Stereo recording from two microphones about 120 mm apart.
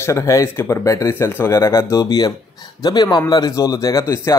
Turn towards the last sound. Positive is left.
turn(degrees=25)  # may be behind; listen again after turning